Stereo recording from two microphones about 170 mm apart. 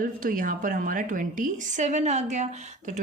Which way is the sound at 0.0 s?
55° right (ahead or behind).